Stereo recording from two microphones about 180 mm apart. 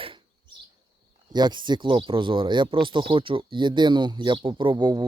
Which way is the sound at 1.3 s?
25° right (ahead or behind).